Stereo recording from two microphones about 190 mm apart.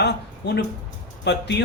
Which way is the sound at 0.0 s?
60° left (ahead or behind).